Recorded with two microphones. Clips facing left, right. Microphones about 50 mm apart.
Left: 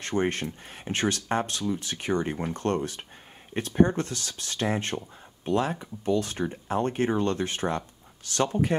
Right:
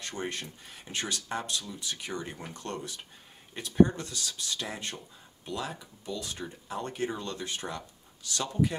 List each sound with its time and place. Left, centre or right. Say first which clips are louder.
0.0 s speech: left 9 dB; left